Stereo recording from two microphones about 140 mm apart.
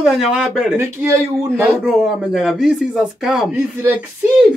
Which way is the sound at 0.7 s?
15° right (ahead or behind).